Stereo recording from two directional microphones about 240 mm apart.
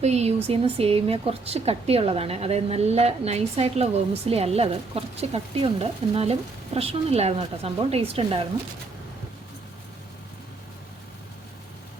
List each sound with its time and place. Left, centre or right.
0.0 s a woman's voice: right